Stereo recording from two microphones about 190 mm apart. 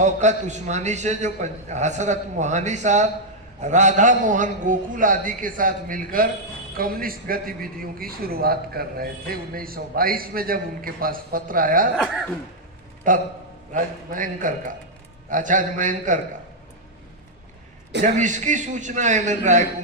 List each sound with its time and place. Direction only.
0.0 s a man's voice: 40° right (ahead or behind)
13.1 s a man's voice: 45° right (ahead or behind)
18.2 s a man's voice: 40° right (ahead or behind)